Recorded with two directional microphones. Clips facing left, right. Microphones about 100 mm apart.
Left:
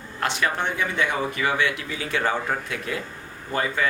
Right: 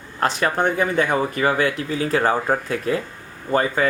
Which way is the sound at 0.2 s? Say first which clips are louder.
Right 5 dB; 40° right (ahead or behind).